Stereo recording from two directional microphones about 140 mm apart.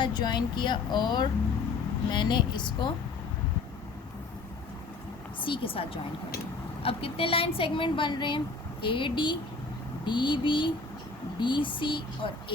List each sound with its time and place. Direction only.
0.0 s a woman's voice: 30° left (ahead or behind)
5.4 s a woman's voice: 40° left (ahead or behind)